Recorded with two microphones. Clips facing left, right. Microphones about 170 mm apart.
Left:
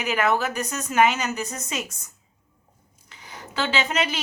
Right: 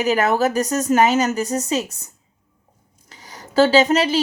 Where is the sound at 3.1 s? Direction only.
40° right (ahead or behind).